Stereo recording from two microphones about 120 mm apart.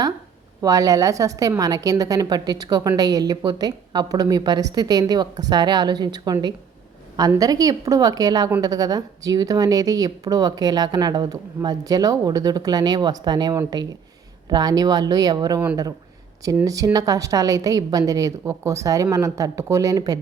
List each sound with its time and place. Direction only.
0.6 s a woman's voice: 30° right (ahead or behind)